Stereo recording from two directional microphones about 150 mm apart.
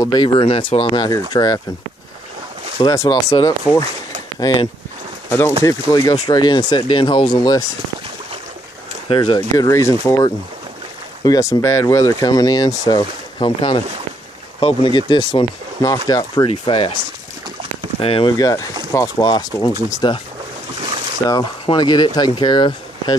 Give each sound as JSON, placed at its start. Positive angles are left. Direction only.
{"t": 0.0, "sound": "speech", "side_deg": 30}
{"t": 2.8, "sound": "speech", "side_deg": 25}
{"t": 9.1, "sound": "speech", "side_deg": 30}
{"t": 16.4, "sound": "speech", "side_deg": 40}
{"t": 18.0, "sound": "speech", "side_deg": 40}
{"t": 18.4, "sound": "speech", "side_deg": 25}
{"t": 21.3, "sound": "speech", "side_deg": 30}